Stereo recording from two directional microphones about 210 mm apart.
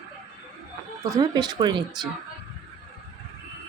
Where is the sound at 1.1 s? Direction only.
20° right (ahead or behind).